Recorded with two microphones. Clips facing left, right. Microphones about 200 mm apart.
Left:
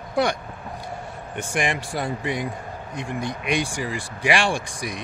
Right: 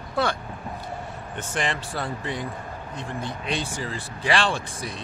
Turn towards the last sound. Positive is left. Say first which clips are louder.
# left 3 dB
turn(degrees=15)  # may be behind; listen again after turning